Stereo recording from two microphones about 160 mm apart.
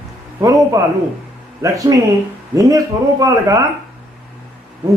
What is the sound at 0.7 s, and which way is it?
Speech, 20° right (ahead or behind).